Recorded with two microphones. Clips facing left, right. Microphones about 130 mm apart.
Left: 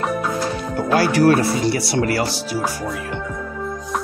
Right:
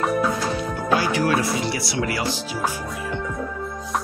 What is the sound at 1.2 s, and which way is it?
Speech, 45° left (ahead or behind).